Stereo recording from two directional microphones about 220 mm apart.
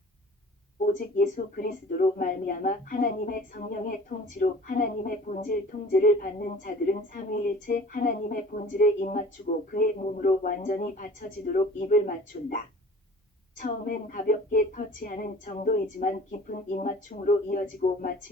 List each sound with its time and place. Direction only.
0.9 s speech: 40° left (ahead or behind)
13.6 s speech: 40° left (ahead or behind)